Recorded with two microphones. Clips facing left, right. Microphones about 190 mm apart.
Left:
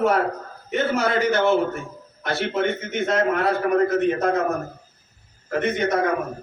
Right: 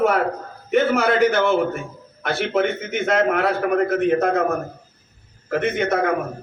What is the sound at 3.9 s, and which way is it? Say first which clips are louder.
Speech: right 2 dB; 60° right (ahead or behind).